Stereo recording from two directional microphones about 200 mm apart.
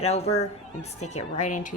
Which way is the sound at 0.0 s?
30° left (ahead or behind).